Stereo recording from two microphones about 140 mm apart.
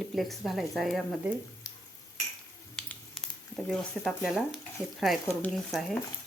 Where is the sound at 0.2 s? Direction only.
Centre (ahead or behind).